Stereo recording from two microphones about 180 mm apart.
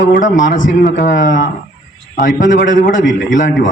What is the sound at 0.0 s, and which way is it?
A man's voice, 45° left (ahead or behind).